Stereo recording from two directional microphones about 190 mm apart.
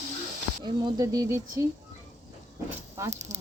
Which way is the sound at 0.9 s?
20° right (ahead or behind).